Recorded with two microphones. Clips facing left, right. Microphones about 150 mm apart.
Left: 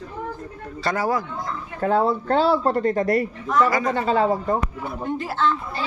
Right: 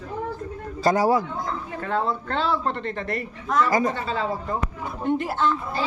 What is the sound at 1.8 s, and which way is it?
A man's voice, 40° left (ahead or behind).